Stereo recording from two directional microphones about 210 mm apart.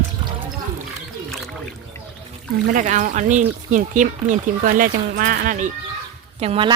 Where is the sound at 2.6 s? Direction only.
40° right (ahead or behind).